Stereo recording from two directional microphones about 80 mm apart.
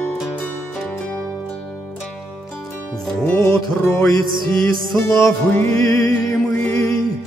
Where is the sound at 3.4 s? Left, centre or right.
Left.